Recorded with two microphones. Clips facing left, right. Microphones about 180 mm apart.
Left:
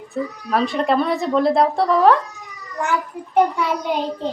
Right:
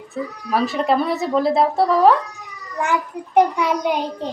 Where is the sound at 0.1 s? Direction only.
5° right (ahead or behind).